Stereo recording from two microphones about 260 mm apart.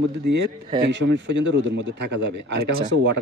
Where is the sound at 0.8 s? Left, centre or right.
Right.